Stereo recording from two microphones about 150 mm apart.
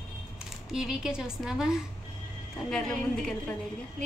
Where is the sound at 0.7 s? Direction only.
5° right (ahead or behind).